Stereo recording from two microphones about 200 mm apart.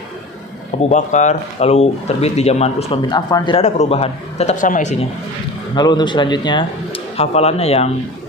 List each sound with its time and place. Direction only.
0.8 s speech: 35° left (ahead or behind)
3.6 s speech: 30° left (ahead or behind)
5.7 s speech: 20° left (ahead or behind)